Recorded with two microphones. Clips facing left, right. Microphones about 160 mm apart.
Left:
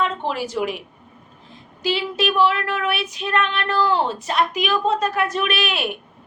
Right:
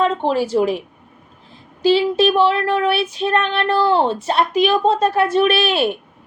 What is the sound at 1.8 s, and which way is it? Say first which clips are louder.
Child singing: right 8 dB; 30° right (ahead or behind).